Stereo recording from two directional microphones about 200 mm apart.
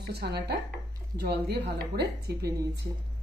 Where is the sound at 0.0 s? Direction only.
55° right (ahead or behind).